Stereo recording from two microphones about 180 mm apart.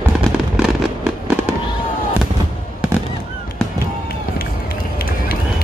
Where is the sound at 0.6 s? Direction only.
5° right (ahead or behind).